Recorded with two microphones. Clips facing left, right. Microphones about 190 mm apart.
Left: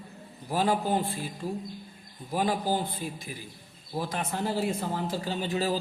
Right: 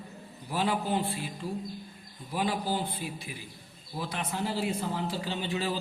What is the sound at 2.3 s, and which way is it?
A man's voice, 45° left (ahead or behind).